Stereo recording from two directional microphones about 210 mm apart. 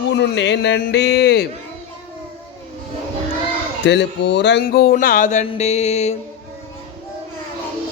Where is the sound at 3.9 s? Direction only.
55° left (ahead or behind); by 6.1 s 30° left (ahead or behind).